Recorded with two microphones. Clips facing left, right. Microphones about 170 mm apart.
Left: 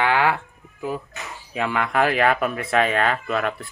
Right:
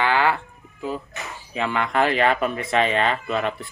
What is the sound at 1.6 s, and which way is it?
Speech, 5° left (ahead or behind).